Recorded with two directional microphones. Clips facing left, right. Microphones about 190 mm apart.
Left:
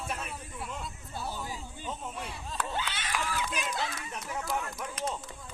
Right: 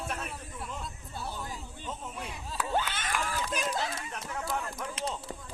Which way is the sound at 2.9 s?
45° right (ahead or behind).